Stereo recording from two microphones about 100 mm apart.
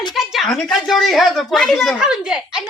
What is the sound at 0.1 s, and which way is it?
Speech, centre (ahead or behind).